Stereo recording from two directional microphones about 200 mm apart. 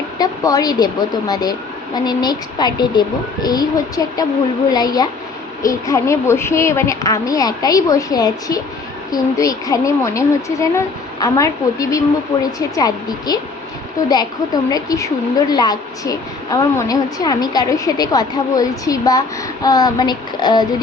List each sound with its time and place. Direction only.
0.2 s a woman's voice: 20° left (ahead or behind)